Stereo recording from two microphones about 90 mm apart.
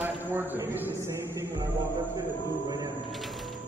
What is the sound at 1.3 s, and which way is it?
Music, 30° right (ahead or behind).